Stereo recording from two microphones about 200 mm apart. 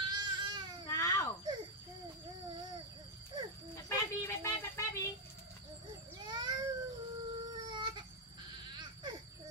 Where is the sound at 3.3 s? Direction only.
20° right (ahead or behind).